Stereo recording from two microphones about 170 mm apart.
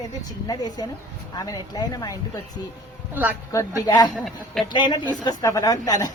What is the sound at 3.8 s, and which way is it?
A woman's voice, 25° left (ahead or behind).